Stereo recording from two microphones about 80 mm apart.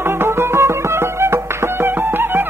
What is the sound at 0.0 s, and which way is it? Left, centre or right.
Music, right.